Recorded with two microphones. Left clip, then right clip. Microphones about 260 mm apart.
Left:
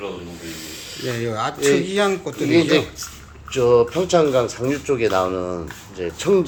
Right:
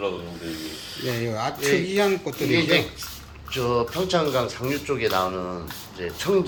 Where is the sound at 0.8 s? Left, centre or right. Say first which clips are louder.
Left 4 dB; left.